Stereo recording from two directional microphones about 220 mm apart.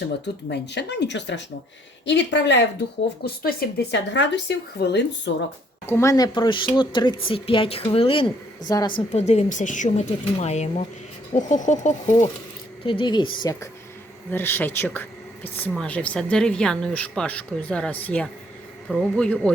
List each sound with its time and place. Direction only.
0.5 s speech: 50° left (ahead or behind)
5.8 s speech: 10° left (ahead or behind)
9.0 s speech: 30° left (ahead or behind); by 19.5 s 5° left (ahead or behind)